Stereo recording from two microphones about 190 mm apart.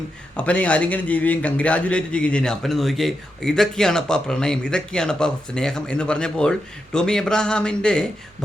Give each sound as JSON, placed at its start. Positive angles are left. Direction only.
{"t": 0.3, "sound": "speech", "side_deg": 5}